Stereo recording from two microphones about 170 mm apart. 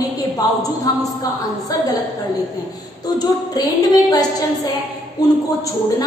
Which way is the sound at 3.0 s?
20° left (ahead or behind).